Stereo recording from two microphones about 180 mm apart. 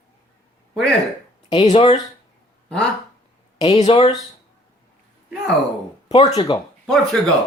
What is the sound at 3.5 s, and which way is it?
Speech, 35° left (ahead or behind).